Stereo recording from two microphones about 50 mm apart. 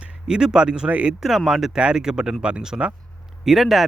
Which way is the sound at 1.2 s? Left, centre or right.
Centre.